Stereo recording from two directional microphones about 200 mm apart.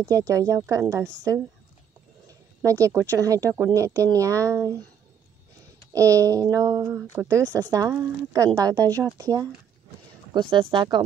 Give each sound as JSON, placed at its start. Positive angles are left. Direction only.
{"t": 0.1, "sound": "speech", "side_deg": -15}
{"t": 2.2, "sound": "speech", "side_deg": -15}
{"t": 5.9, "sound": "speech", "side_deg": -15}
{"t": 10.5, "sound": "speech", "side_deg": -25}